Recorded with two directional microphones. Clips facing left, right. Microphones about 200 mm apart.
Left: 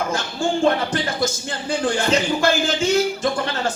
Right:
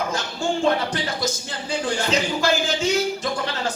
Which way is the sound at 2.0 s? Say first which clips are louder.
Left 3 dB; 50° left (ahead or behind).